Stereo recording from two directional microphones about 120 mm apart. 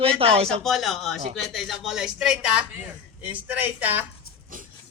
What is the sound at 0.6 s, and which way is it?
Speech, centre (ahead or behind).